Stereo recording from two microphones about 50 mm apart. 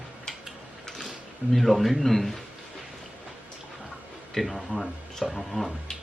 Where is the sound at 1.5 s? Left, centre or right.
Centre.